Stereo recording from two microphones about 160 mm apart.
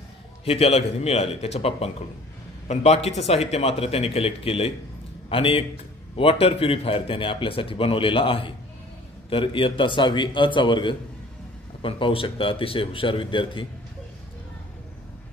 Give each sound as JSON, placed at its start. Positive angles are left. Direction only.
{"t": 0.5, "sound": "a man's voice", "side_deg": 40}